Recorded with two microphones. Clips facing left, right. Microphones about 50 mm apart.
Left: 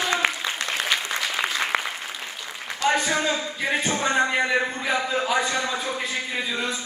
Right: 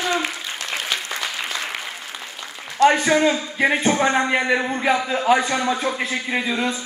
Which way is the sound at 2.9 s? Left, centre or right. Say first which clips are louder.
Right 5 dB; right.